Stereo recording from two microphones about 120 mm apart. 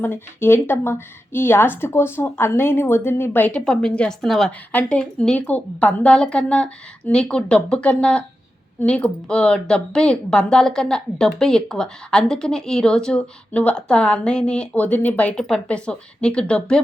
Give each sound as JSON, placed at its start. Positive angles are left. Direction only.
{"t": 0.0, "sound": "a woman's voice", "side_deg": 20}